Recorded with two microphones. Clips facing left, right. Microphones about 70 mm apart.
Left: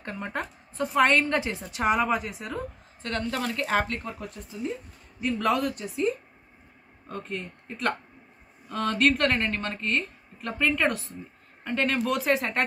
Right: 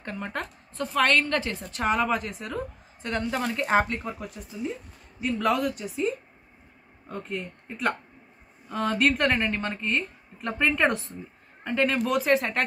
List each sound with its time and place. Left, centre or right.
0.0 s a woman's voice: centre
0.8 s a woman's voice: centre
3.0 s a woman's voice: centre
11.6 s a woman's voice: centre